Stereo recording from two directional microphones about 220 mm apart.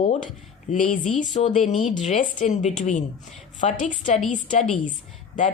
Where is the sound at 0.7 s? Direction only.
35° left (ahead or behind).